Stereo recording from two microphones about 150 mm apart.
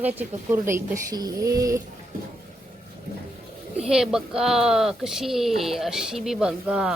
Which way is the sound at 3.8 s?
5° right (ahead or behind).